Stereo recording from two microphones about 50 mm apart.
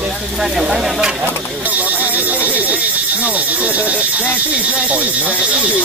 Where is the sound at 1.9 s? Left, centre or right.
Right.